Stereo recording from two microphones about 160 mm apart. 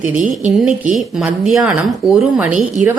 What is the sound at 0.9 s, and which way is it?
A woman's voice, 5° right (ahead or behind).